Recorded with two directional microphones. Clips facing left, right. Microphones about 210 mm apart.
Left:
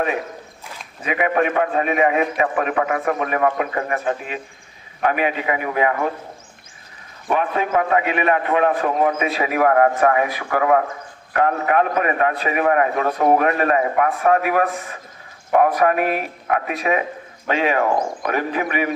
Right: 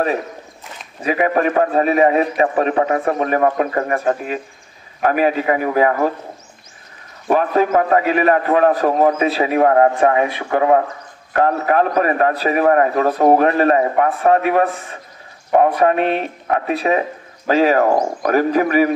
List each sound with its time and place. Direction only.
1.0 s a man's voice: 35° right (ahead or behind)
7.2 s a man's voice: 40° right (ahead or behind)